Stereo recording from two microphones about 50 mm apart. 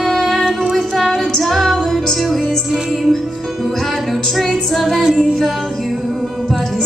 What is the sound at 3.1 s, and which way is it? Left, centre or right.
Music, centre.